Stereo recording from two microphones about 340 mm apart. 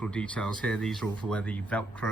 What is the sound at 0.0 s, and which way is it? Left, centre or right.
Speech, centre.